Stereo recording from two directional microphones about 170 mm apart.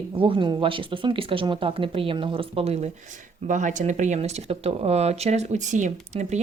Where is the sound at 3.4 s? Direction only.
50° right (ahead or behind).